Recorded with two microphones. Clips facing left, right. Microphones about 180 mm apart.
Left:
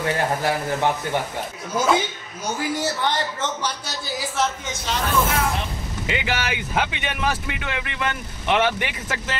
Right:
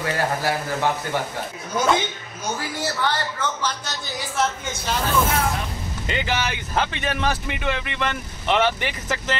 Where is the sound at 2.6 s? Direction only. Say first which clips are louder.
Left 3 dB; 20° left (ahead or behind).